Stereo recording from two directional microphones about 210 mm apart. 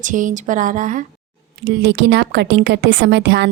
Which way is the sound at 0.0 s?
40° right (ahead or behind).